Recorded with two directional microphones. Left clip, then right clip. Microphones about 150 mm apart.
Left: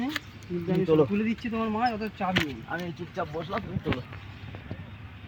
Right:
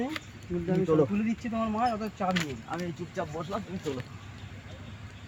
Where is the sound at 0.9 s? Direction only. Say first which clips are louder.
Left 3 dB; 5° left (ahead or behind).